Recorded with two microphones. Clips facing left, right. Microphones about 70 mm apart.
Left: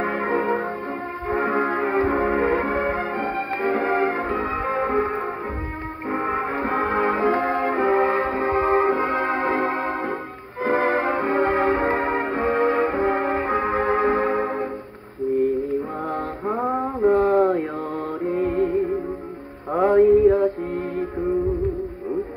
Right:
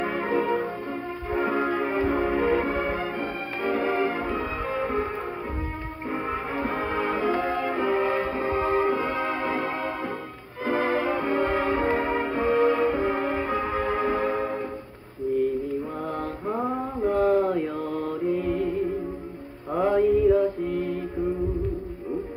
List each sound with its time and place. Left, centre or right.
0.0 s music: left
6.1 s brass instrument: left
8.4 s music: left
10.6 s music: left
12.9 s music: left
16.6 s mantra: left
17.5 s mantra: left
20.0 s mantra: left